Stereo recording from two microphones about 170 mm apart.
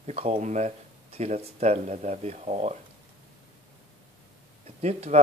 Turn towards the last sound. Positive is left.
turn(degrees=-40)  # may be behind; listen again after turning